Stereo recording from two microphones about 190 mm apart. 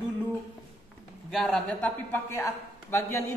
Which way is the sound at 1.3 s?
Centre (ahead or behind).